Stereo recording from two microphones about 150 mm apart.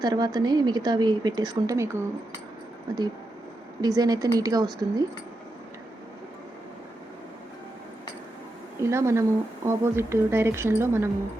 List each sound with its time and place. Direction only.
0.0 s a woman's voice: 25° right (ahead or behind)
2.9 s a woman's voice: 30° right (ahead or behind)
8.8 s a woman's voice: 20° right (ahead or behind)